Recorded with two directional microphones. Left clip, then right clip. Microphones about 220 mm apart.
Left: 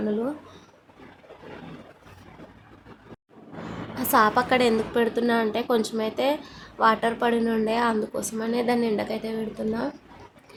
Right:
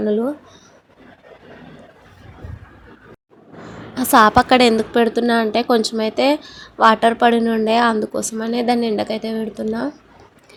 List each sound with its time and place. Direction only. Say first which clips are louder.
3.9 s speech: right 8 dB; 25° right (ahead or behind)